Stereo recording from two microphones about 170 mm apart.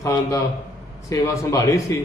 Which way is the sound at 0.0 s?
20° left (ahead or behind).